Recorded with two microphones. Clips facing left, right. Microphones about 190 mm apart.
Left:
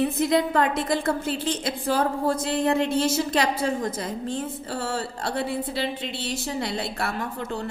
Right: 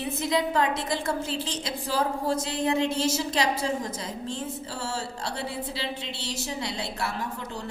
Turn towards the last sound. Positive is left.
turn(degrees=55)  # may be behind; listen again after turning